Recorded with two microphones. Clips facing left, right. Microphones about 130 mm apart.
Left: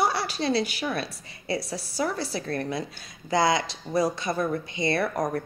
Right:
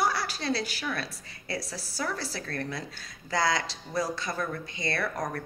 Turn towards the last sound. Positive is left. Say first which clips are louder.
# left 6 dB
turn(degrees=20)  # may be behind; listen again after turning